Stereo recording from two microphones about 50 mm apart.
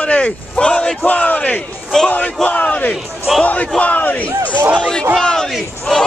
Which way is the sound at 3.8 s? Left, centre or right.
Left.